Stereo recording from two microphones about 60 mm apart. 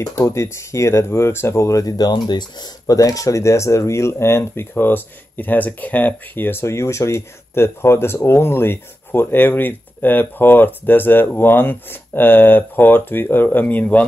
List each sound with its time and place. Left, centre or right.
0.0 s speech: left
2.9 s speech: left